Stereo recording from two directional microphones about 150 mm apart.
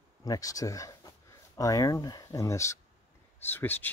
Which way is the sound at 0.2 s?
25° left (ahead or behind).